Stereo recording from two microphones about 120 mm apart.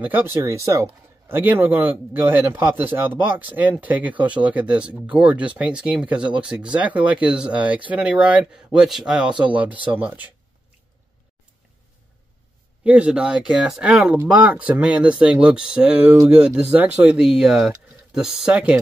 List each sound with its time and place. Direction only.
0.0 s a man's voice: 15° right (ahead or behind)
12.8 s a man's voice: 10° right (ahead or behind)